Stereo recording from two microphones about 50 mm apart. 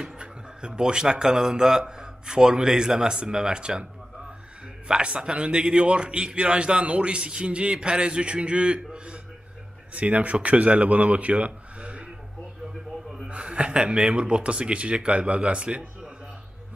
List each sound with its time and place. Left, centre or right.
0.0 s speech: centre
4.8 s a man's voice: right
13.3 s a man's voice: right